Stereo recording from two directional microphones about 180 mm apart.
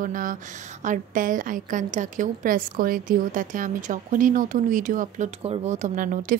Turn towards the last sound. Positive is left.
turn(degrees=-45)  # may be behind; listen again after turning